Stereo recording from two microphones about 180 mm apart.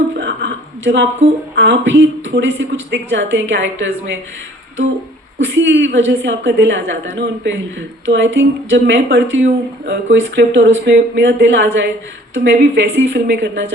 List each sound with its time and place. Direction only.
0.2 s a sound: 85° right
1.5 s a woman's voice: 90° right
5.4 s a woman's voice: 90° right